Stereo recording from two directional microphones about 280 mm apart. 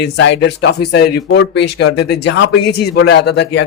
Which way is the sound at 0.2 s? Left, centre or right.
Left.